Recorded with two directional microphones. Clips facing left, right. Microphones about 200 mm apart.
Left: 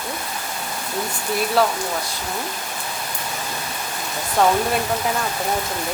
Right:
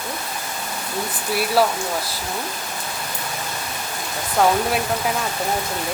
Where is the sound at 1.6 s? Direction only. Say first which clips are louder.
Right 1 dB; 5° right (ahead or behind).